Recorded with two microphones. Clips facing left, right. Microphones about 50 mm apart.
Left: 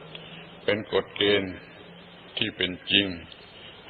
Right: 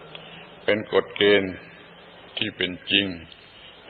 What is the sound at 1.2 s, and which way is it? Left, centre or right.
Speech, right.